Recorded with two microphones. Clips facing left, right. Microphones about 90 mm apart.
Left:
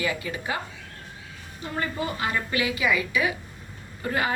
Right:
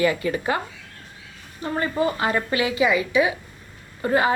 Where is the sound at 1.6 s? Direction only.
35° right (ahead or behind).